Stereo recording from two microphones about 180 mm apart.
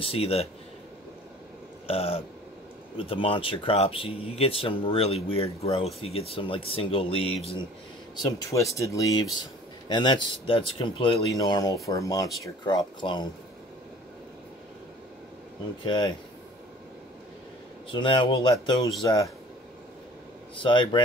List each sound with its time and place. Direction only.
0.0 s speech: 35° left (ahead or behind)
1.9 s speech: 35° left (ahead or behind)
8.2 s speech: 20° left (ahead or behind)
15.8 s speech: 25° left (ahead or behind)
17.9 s speech: 25° left (ahead or behind)
20.6 s speech: 25° left (ahead or behind)